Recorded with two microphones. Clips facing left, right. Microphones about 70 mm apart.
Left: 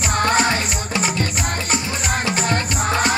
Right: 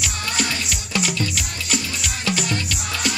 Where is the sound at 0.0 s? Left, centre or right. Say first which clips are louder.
Left 8 dB; left.